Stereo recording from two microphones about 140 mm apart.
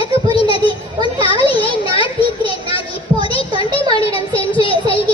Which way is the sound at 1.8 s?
40° left (ahead or behind).